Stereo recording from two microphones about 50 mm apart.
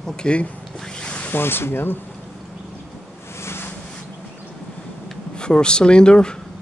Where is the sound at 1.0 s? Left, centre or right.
Left.